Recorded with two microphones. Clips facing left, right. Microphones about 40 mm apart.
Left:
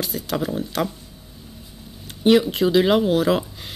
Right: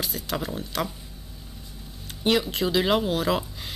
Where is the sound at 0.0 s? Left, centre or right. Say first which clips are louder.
Left 5 dB; centre.